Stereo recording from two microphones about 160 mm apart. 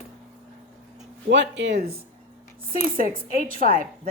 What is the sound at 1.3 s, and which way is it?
Speech, 90° right.